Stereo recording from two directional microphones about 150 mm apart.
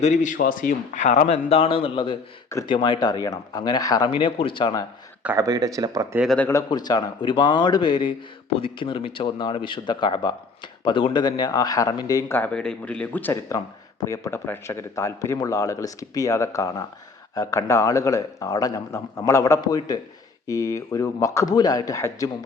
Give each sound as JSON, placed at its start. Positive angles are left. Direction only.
{"t": 0.0, "sound": "speech", "side_deg": 50}
{"t": 5.2, "sound": "speech", "side_deg": -15}
{"t": 5.5, "sound": "speech", "side_deg": -25}
{"t": 6.5, "sound": "speech", "side_deg": 25}
{"t": 12.4, "sound": "speech", "side_deg": 5}